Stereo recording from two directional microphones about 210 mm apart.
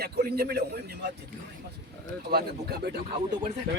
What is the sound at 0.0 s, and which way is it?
Speech, 50° right (ahead or behind).